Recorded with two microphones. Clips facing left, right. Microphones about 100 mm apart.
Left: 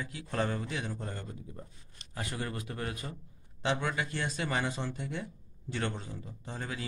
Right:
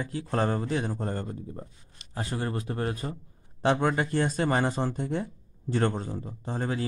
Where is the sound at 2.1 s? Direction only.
30° right (ahead or behind).